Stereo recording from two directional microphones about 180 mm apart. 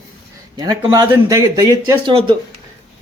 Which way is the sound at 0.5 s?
20° right (ahead or behind).